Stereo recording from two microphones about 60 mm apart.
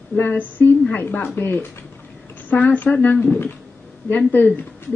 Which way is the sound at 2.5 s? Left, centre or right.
Left.